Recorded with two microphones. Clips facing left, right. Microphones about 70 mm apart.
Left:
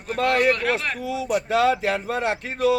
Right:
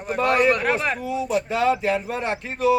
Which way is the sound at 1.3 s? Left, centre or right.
Left.